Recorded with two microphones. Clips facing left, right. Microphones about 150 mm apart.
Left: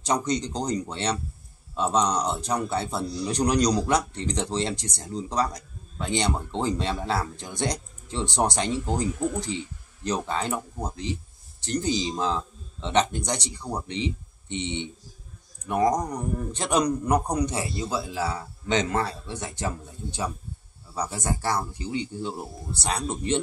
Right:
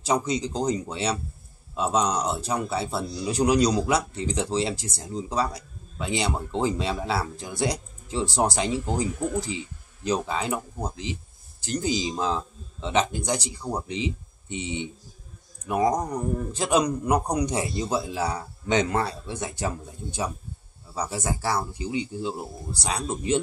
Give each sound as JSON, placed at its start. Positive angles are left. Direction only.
{"t": 0.0, "sound": "a man's voice", "side_deg": -5}